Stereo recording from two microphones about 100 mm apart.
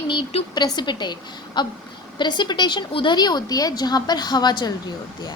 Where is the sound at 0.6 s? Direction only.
45° left (ahead or behind).